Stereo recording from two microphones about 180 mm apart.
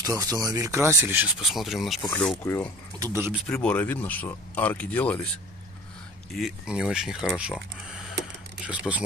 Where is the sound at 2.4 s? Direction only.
15° left (ahead or behind).